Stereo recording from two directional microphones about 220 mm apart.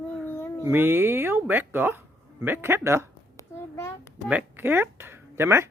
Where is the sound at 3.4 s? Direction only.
10° left (ahead or behind).